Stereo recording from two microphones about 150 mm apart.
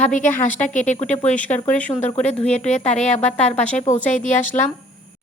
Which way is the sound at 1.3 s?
10° left (ahead or behind).